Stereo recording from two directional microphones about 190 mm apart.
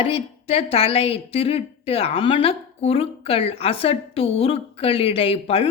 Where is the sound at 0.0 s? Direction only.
30° left (ahead or behind).